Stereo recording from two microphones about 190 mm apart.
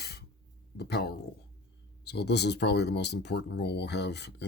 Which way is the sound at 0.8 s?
60° left (ahead or behind).